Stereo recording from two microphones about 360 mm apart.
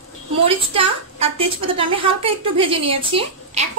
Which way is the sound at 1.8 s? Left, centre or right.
Centre.